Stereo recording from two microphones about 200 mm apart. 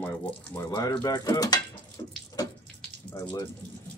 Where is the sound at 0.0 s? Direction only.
5° left (ahead or behind).